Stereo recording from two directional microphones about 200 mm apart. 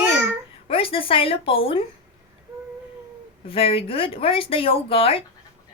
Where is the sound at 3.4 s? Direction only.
25° left (ahead or behind).